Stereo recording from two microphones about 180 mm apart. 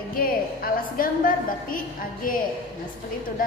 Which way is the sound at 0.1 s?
55° left (ahead or behind).